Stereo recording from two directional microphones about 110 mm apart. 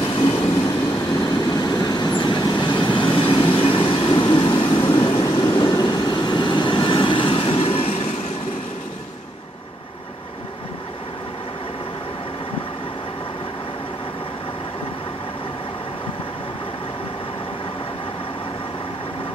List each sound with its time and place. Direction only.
0.1 s train: 45° left (ahead or behind)
1.2 s vehicle: 35° left (ahead or behind)
3.4 s train: 50° left (ahead or behind)
5.5 s vehicle: 45° left (ahead or behind); by 8.1 s 60° left (ahead or behind)